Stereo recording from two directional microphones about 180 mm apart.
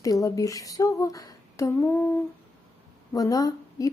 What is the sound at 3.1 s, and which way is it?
Speech, 20° left (ahead or behind).